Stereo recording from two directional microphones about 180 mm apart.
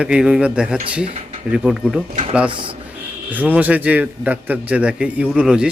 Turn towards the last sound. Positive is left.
turn(degrees=-5)  # may be behind; listen again after turning